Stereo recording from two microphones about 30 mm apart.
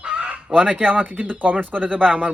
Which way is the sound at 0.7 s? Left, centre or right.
Right.